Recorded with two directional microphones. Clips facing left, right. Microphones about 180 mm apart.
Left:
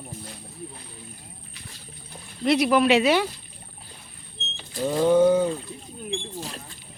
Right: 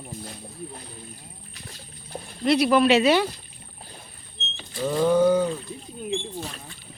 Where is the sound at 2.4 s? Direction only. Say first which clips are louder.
Even; 20° left (ahead or behind).